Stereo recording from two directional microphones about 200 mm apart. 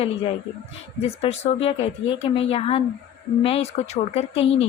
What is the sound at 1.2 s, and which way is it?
Speech, 30° left (ahead or behind).